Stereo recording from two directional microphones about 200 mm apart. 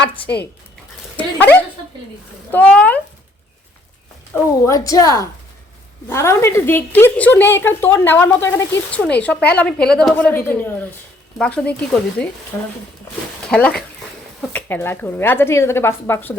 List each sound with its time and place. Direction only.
1.1 s dog: 10° left (ahead or behind)
2.5 s a woman's voice: 5° left (ahead or behind)
4.4 s a woman's voice: 15° left (ahead or behind)
13.5 s a woman's voice: 5° left (ahead or behind)